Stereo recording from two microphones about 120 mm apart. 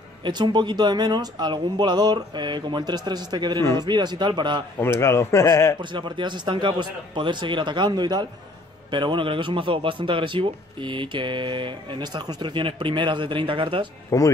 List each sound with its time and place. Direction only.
0.2 s speech: 40° right (ahead or behind)
5.0 s a man's voice: 20° left (ahead or behind)
5.8 s a man's voice: 40° right (ahead or behind)
14.1 s a man's voice: 25° left (ahead or behind)